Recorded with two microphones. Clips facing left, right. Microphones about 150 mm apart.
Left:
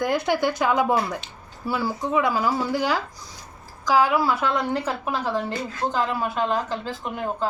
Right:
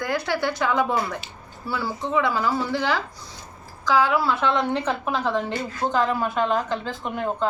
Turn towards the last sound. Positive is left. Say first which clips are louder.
# right 2 dB
turn(degrees=5)  # may be behind; listen again after turning